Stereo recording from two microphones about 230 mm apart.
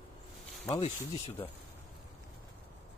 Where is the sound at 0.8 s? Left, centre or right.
Left.